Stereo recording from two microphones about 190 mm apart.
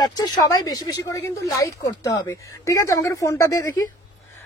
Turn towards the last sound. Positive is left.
turn(degrees=15)  # may be behind; listen again after turning